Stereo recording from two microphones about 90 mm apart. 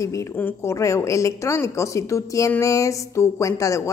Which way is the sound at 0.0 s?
35° left (ahead or behind).